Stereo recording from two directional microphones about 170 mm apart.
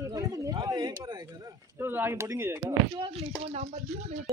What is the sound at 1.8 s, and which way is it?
Speech, 15° right (ahead or behind).